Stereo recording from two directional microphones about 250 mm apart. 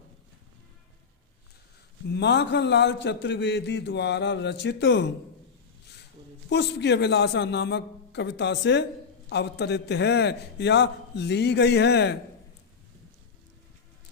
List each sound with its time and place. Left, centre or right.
2.0 s a man's voice: left
6.5 s a man's voice: left